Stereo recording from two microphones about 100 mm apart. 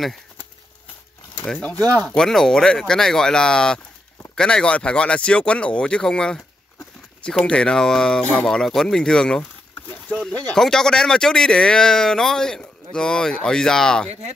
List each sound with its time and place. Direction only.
1.6 s speech: 15° left (ahead or behind)
9.4 s a sound: 20° left (ahead or behind)
10.3 s speech: 5° left (ahead or behind)